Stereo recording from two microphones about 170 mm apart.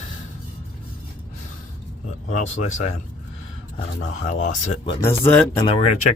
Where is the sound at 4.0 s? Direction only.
45° left (ahead or behind).